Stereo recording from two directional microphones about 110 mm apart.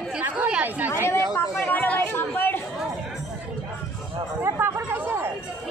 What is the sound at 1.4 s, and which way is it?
Chatter, 20° left (ahead or behind).